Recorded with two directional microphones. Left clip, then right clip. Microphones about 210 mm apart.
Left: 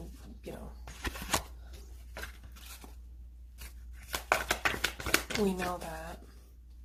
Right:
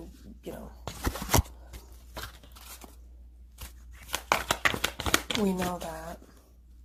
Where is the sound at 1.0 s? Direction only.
25° right (ahead or behind).